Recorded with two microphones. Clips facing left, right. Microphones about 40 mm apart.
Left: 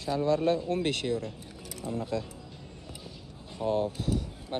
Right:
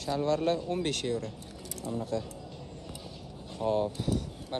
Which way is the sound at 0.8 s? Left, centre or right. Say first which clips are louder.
Left 2 dB; left.